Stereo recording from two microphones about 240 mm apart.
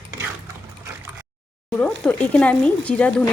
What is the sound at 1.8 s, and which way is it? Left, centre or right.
Speech, centre.